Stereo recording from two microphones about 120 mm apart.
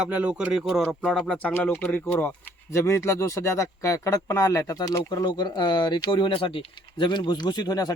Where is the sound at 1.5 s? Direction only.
15° left (ahead or behind).